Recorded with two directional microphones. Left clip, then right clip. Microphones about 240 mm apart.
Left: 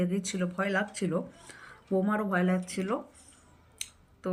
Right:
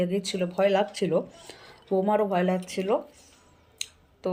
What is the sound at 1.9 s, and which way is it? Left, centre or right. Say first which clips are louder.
Speech: right 4 dB; right.